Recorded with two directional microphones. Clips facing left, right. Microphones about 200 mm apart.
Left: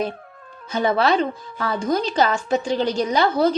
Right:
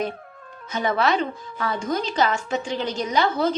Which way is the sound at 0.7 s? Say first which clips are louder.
Left 3 dB; 30° left (ahead or behind).